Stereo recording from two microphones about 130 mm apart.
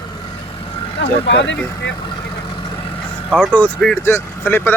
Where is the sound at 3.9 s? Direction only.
20° left (ahead or behind).